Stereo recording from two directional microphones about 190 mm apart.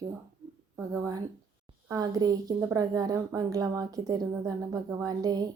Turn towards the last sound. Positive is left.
turn(degrees=-20)  # may be behind; listen again after turning